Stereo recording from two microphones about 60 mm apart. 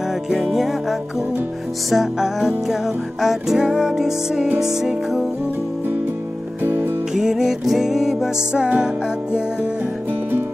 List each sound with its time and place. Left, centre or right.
0.3 s music: centre
6.6 s music: right
7.2 s music: centre